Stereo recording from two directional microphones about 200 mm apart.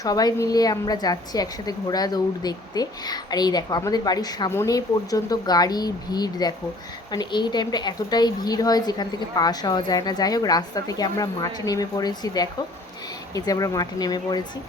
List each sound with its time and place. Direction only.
0.0 s a woman's voice: 20° left (ahead or behind)